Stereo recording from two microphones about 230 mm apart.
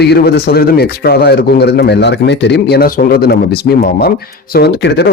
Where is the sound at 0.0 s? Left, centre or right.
Left.